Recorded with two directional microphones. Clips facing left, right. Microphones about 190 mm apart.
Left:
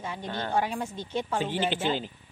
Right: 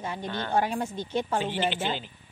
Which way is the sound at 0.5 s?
45° right (ahead or behind).